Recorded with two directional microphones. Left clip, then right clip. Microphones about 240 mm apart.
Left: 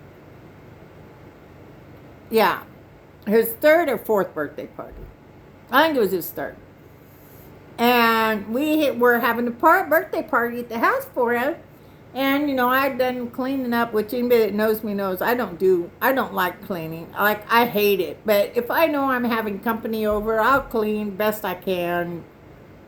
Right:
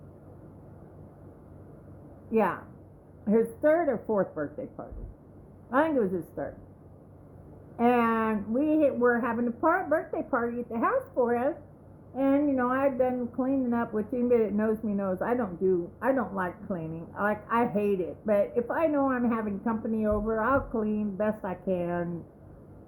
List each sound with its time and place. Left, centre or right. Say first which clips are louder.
2.3 s speech: left 8 dB; centre
7.8 s speech: left 8 dB; centre